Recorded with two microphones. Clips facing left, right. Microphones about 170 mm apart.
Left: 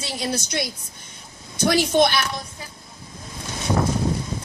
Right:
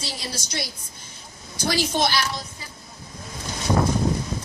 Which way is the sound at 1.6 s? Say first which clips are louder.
Left 5 dB; 60° left (ahead or behind).